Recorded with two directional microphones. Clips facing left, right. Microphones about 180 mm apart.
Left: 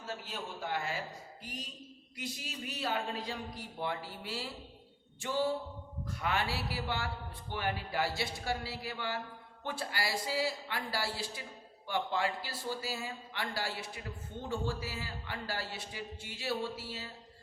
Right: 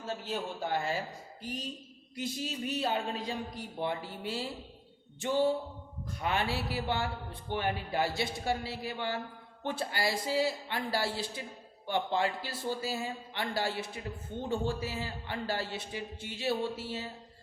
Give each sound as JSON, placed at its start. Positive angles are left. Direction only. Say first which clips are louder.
{"t": 0.0, "sound": "speech", "louder": "right 6 dB", "side_deg": -30}
{"t": 2.1, "sound": "speech", "louder": "right 7 dB", "side_deg": -25}